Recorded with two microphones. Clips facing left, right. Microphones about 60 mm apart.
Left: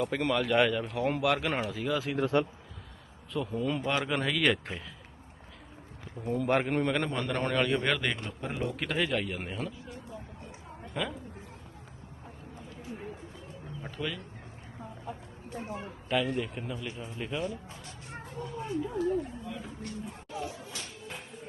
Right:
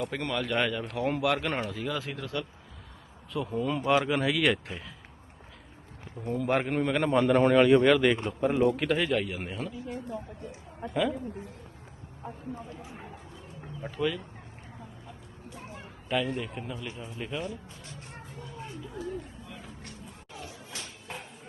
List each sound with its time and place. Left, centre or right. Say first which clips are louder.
0.0 s a man's voice: left 3 dB; centre
2.1 s speech: left 8 dB; left
3.3 s a man's voice: right 1 dB; centre
6.2 s a man's voice: even; centre
13.8 s speech: right 6 dB; centre
16.0 s a man's voice: even; centre
18.6 s chatter: left 8 dB; left